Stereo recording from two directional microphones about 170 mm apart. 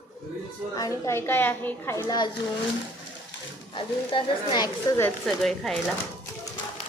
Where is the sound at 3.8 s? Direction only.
25° left (ahead or behind).